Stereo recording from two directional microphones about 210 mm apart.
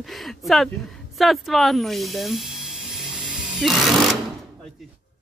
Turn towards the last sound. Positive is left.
turn(degrees=0)  # may be behind; listen again after turning